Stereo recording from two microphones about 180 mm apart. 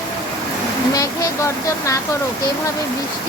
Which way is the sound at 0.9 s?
20° left (ahead or behind).